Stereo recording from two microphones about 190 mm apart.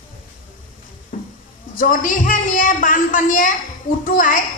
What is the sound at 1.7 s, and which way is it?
A man's voice, 45° left (ahead or behind).